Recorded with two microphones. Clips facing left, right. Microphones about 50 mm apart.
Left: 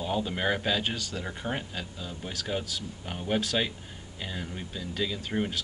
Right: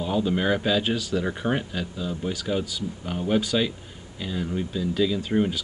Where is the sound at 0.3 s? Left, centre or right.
Centre.